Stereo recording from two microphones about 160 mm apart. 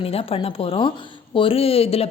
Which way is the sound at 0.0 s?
35° left (ahead or behind).